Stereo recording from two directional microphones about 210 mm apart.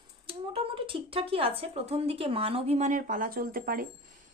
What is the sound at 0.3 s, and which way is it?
A woman's voice, 25° right (ahead or behind).